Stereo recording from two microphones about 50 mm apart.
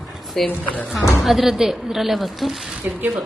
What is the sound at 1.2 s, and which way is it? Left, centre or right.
Speech, centre.